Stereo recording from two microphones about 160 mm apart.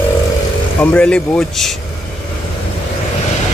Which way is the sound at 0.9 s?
5° left (ahead or behind).